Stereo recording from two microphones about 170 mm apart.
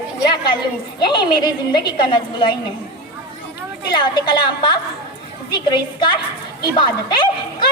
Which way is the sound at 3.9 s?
25° left (ahead or behind).